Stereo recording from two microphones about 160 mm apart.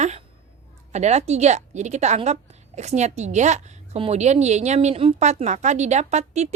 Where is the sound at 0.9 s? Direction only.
45° right (ahead or behind).